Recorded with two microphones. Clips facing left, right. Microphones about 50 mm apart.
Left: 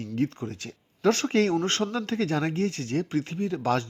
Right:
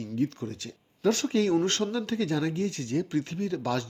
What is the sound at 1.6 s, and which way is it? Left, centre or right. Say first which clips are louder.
Speech: left 1 dB; left.